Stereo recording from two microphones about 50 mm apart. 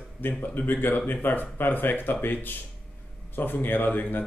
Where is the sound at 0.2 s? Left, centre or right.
Left.